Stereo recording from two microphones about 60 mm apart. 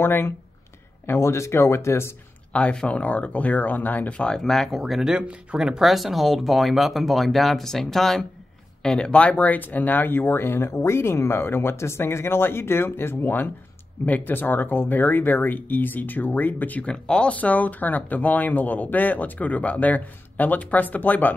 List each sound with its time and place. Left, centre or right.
0.0 s speech: left
2.5 s speech: centre
4.4 s speech: centre; by 16.8 s left
16.8 s speech: centre